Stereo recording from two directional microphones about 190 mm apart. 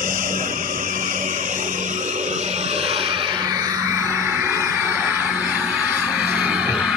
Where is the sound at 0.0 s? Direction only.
45° right (ahead or behind).